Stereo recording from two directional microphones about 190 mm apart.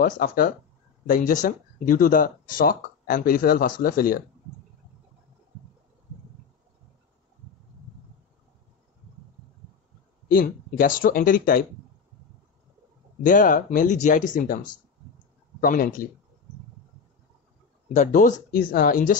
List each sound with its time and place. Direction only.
0.0 s speech: 50° left (ahead or behind)
10.2 s speech: 50° left (ahead or behind)
13.2 s speech: 45° left (ahead or behind)
17.9 s speech: 40° left (ahead or behind)